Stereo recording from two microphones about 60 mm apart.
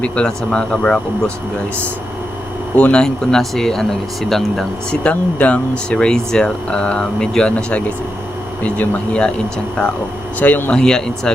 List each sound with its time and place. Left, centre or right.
0.0 s speech: centre
2.7 s speech: left
3.0 s speech: centre
5.0 s speech: left
7.5 s speech: left
10.4 s speech: left
10.8 s speech: centre